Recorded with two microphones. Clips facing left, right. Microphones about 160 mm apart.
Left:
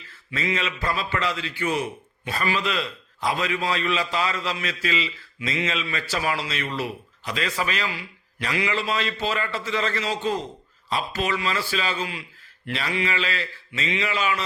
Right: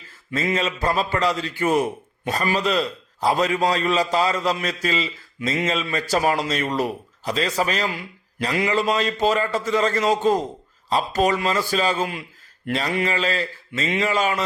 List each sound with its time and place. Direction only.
0.3 s a man's voice: 45° right (ahead or behind)